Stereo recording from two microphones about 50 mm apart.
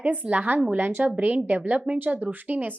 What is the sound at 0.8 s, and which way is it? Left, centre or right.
A woman's voice, right.